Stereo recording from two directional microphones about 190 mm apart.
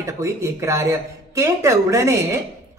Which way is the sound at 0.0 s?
15° right (ahead or behind).